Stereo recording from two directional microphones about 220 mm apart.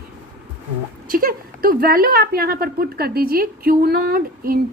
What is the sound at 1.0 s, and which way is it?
A woman's voice, 40° right (ahead or behind).